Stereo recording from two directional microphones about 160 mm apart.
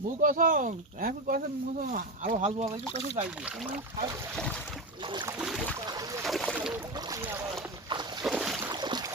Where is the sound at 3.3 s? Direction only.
5° right (ahead or behind).